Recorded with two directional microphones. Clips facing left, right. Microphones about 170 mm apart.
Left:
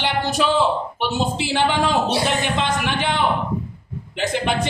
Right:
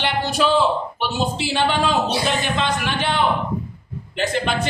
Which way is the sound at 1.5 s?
15° left (ahead or behind).